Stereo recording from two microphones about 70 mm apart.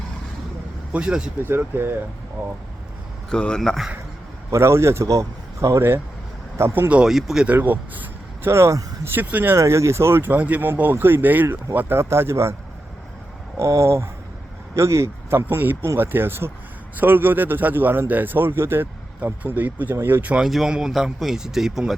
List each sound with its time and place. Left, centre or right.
0.9 s speech: centre
1.5 s speech: right
3.2 s speech: centre
4.5 s a man's voice: right
6.7 s speech: right
7.0 s speech: centre
7.4 s speech: right
8.4 s speech: right
9.1 s speech: right
9.6 s speech: right
13.6 s a man's voice: right
15.4 s speech: right
20.4 s speech: centre